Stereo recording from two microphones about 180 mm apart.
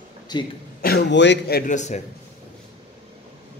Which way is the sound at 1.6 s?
40° left (ahead or behind).